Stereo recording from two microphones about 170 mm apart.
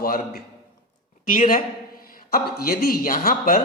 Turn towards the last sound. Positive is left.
turn(degrees=55)  # may be behind; listen again after turning